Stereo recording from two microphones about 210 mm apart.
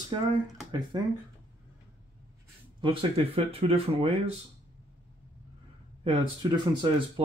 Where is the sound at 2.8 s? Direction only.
25° right (ahead or behind).